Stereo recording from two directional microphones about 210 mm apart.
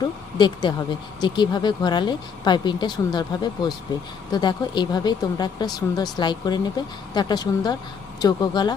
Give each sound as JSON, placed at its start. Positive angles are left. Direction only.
{"t": 0.0, "sound": "speech", "side_deg": 20}